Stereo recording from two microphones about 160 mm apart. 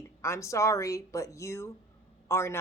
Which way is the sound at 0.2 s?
20° left (ahead or behind).